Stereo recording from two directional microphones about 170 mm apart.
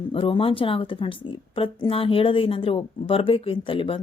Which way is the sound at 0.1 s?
30° left (ahead or behind).